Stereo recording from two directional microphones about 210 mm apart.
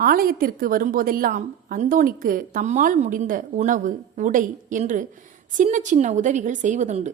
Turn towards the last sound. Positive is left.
turn(degrees=-35)  # may be behind; listen again after turning